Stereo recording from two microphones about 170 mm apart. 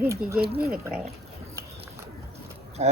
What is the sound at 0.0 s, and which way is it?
A woman's voice, 15° right (ahead or behind).